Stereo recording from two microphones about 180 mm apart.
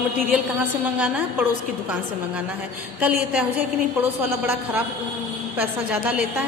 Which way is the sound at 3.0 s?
5° right (ahead or behind).